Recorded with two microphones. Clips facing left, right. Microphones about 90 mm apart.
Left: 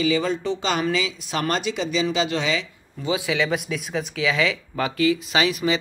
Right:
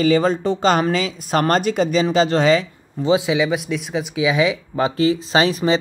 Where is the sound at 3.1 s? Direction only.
25° right (ahead or behind).